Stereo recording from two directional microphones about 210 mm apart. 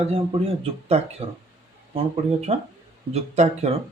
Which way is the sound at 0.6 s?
30° right (ahead or behind).